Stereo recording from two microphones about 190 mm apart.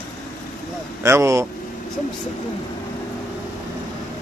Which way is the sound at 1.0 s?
15° right (ahead or behind).